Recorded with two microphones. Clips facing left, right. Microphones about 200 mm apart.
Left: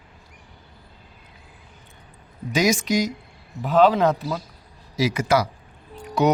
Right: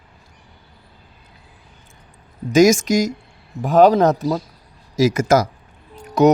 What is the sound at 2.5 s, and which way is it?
A woman's voice, 45° right (ahead or behind).